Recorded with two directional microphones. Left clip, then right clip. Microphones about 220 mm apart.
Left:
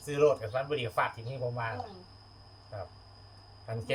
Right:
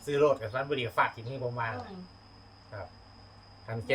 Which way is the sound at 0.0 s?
5° right (ahead or behind).